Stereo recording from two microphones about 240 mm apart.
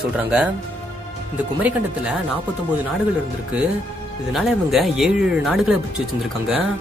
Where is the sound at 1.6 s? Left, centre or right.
Centre.